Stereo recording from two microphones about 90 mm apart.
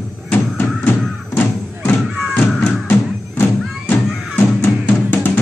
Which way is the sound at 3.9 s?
20° left (ahead or behind).